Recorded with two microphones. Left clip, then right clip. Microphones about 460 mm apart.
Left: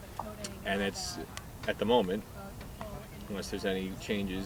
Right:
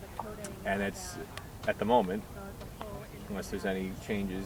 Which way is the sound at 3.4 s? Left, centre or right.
Centre.